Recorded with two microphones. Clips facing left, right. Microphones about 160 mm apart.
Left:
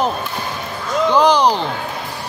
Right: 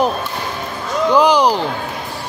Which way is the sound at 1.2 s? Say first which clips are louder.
Even; 10° right (ahead or behind).